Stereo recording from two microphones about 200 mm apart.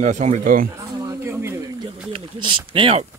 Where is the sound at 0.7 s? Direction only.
10° right (ahead or behind).